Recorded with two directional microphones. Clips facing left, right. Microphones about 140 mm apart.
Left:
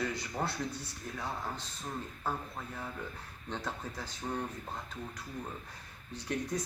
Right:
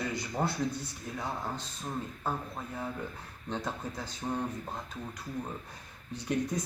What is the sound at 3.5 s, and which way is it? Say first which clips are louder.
Speech: right 3 dB; 15° right (ahead or behind).